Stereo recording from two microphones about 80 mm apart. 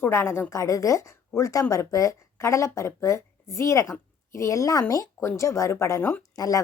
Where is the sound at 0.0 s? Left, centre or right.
Left.